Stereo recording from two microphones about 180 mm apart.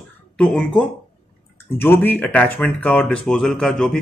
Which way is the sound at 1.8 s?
10° left (ahead or behind).